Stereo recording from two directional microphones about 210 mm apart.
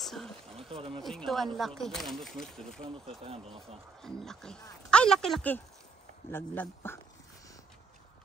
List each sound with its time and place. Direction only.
0.0 s speech: centre (ahead or behind)
0.7 s speech: 25° right (ahead or behind)
1.0 s speech: centre (ahead or behind)
4.0 s speech: centre (ahead or behind)